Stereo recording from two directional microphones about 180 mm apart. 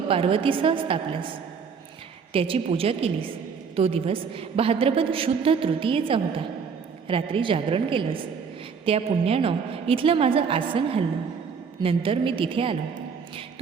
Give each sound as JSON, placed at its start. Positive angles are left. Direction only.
{"t": 0.1, "sound": "a woman's voice", "side_deg": -30}
{"t": 2.3, "sound": "a woman's voice", "side_deg": -30}